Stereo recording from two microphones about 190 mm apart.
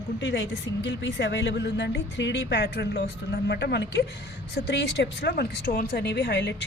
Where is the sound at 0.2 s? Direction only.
70° left (ahead or behind).